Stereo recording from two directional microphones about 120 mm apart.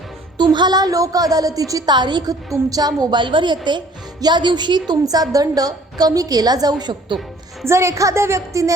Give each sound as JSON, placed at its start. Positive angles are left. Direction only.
{"t": 0.5, "sound": "a woman's voice", "side_deg": -35}
{"t": 7.6, "sound": "a woman's voice", "side_deg": -25}